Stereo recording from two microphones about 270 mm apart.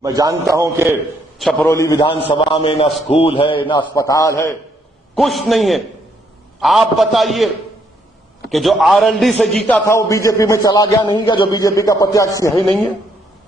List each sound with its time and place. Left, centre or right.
0.0 s a man's voice: centre
1.4 s a man's voice: centre
5.1 s a man's voice: centre
12.5 s a man's voice: centre